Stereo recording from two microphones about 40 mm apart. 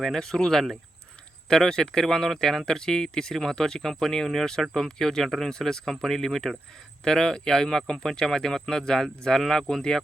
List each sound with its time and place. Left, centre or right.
0.0 s speech: centre
7.0 s speech: centre